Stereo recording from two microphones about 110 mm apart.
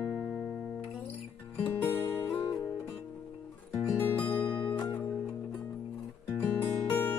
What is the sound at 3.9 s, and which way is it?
Music, 20° left (ahead or behind).